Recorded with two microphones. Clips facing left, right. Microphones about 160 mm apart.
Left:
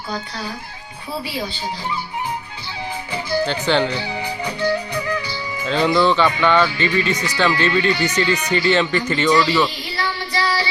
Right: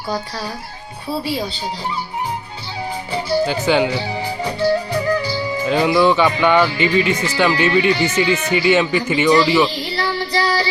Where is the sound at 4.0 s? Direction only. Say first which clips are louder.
Right 3 dB; 25° right (ahead or behind).